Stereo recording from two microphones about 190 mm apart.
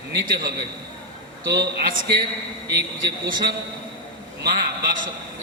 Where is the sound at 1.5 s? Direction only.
50° right (ahead or behind).